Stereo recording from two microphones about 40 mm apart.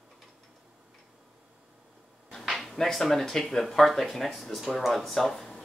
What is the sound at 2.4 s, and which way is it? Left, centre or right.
Speech, centre.